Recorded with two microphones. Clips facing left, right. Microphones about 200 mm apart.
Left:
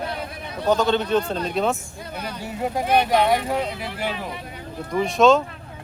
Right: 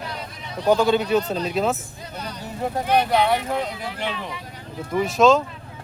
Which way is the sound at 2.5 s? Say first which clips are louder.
Even; 10° left (ahead or behind).